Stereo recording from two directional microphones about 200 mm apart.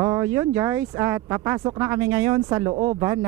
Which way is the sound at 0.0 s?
15° right (ahead or behind).